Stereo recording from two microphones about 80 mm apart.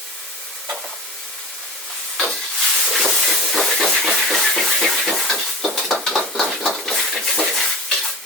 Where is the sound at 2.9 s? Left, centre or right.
Centre.